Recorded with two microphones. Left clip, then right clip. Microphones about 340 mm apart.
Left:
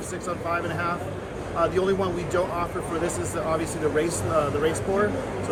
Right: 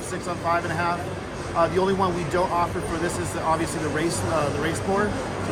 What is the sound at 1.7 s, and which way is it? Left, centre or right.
Speech, centre.